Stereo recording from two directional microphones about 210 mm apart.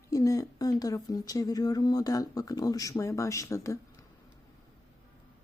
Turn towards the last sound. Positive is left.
turn(degrees=15)  # may be behind; listen again after turning